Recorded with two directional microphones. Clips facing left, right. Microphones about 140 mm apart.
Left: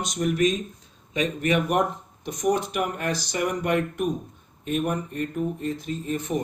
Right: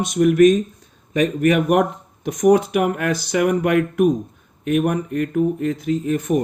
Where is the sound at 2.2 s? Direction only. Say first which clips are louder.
Right 9 dB; 60° right (ahead or behind).